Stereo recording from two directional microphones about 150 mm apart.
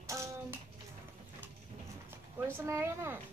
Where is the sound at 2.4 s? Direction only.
15° right (ahead or behind).